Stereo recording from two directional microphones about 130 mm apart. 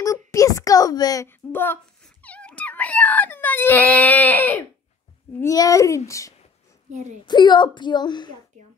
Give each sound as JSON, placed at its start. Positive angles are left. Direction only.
{"t": 0.0, "sound": "a sound", "side_deg": 25}
{"t": 1.5, "sound": "a woman's voice", "side_deg": 15}
{"t": 2.0, "sound": "wail", "side_deg": 10}
{"t": 5.4, "sound": "a child's voice", "side_deg": 25}
{"t": 6.9, "sound": "a child's voice", "side_deg": -65}
{"t": 7.2, "sound": "a woman's voice", "side_deg": 35}